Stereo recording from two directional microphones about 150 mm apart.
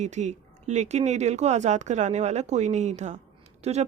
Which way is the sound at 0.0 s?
50° right (ahead or behind).